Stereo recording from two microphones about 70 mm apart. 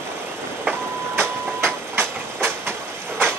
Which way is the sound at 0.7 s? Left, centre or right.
Right.